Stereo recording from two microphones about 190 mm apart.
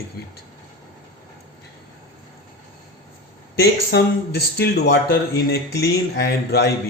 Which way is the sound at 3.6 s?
60° left (ahead or behind).